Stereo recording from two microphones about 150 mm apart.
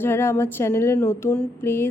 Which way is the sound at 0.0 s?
15° left (ahead or behind).